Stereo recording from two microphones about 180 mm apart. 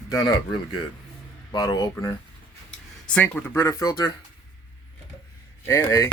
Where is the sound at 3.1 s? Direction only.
10° left (ahead or behind).